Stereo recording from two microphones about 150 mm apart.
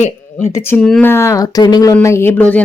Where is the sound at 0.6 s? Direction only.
15° left (ahead or behind).